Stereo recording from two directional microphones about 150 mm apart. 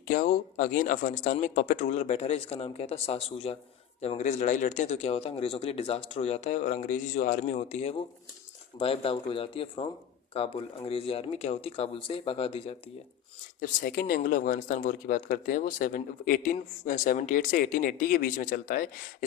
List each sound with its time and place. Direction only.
0.1 s speech: 60° left (ahead or behind); by 12.7 s 40° left (ahead or behind)
13.6 s speech: 70° left (ahead or behind)